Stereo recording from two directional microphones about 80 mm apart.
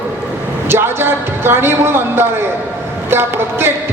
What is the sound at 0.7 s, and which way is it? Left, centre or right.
A man's voice, right.